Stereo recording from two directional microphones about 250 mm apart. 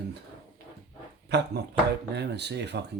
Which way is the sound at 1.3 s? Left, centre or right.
Right.